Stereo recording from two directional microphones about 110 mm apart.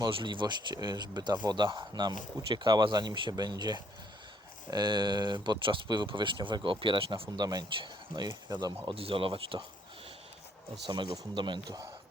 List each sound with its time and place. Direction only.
0.0 s speech: 50° right (ahead or behind)
8.9 s speech: 55° right (ahead or behind)
10.8 s speech: 45° right (ahead or behind)